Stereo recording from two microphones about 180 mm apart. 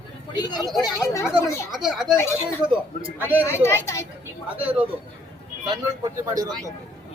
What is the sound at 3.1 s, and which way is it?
Speech, 10° right (ahead or behind).